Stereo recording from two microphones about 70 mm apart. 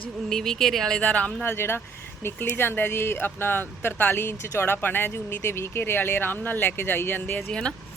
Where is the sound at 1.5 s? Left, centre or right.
Left.